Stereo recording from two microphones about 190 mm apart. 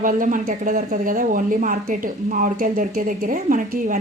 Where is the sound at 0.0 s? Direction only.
45° right (ahead or behind).